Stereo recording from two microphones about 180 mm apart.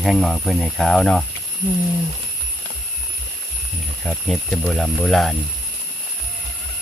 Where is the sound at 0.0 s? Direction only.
Centre (ahead or behind).